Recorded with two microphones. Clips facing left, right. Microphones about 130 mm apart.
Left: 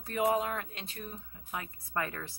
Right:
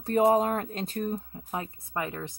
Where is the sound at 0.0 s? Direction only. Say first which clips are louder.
Right 7 dB; 35° right (ahead or behind).